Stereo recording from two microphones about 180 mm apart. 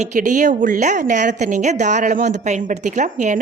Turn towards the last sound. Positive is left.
turn(degrees=-45)  # may be behind; listen again after turning